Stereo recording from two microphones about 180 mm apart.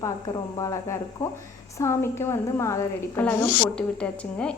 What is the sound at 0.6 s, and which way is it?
A woman's voice, 20° left (ahead or behind).